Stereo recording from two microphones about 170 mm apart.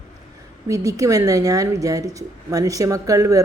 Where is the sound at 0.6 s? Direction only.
20° right (ahead or behind).